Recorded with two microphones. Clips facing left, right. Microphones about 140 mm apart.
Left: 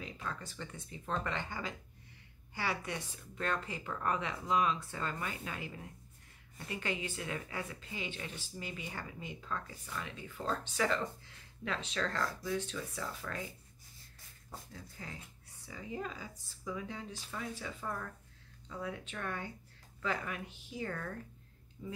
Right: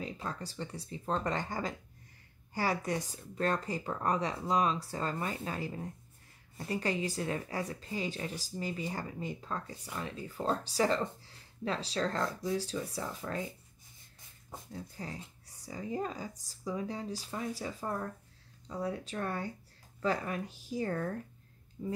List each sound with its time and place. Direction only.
0.0 s speech: 35° right (ahead or behind)
12.2 s speech: 25° right (ahead or behind)
12.5 s speech: 35° right (ahead or behind)
14.7 s speech: 35° right (ahead or behind)